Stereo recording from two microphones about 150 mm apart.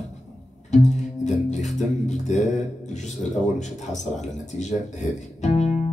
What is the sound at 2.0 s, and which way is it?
Speech, 50° left (ahead or behind).